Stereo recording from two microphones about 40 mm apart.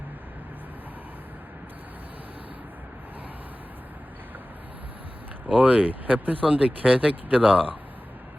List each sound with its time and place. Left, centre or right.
5.5 s speech: right